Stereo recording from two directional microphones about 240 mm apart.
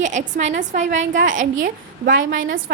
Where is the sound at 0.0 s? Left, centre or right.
Right.